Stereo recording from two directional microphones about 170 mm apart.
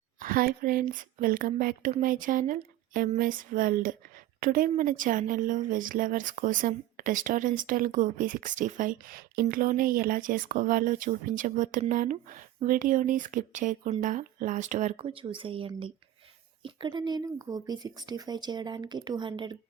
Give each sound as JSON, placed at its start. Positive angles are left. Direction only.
{"t": 0.2, "sound": "speech", "side_deg": -55}